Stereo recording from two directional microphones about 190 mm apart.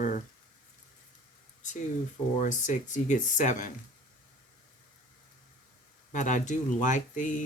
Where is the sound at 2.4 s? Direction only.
40° left (ahead or behind).